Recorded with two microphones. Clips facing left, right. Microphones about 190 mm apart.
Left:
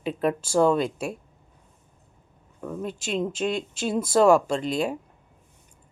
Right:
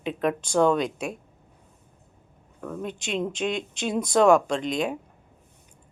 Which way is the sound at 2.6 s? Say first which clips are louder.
Left 1 dB; 5° left (ahead or behind).